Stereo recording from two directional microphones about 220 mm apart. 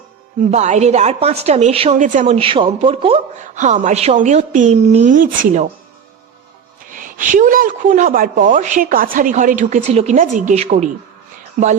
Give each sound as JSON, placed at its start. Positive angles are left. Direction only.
{"t": 0.5, "sound": "a woman's voice", "side_deg": -30}
{"t": 6.9, "sound": "a woman's voice", "side_deg": -35}